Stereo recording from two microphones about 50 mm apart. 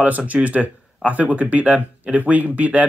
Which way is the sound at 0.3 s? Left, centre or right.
Right.